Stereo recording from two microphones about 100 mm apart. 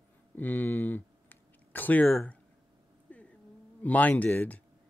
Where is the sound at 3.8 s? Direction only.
15° left (ahead or behind).